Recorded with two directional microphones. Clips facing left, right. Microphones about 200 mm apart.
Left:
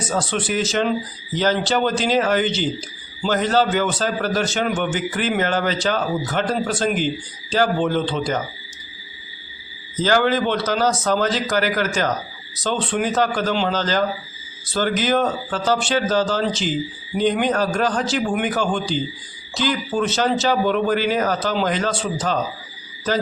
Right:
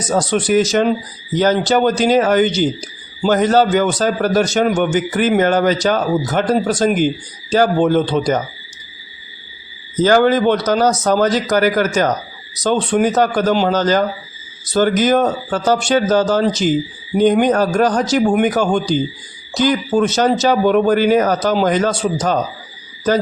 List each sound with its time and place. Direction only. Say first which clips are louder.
0.0 s a man's voice: right 6 dB; 40° right (ahead or behind)
9.9 s a man's voice: right 6 dB; 45° right (ahead or behind)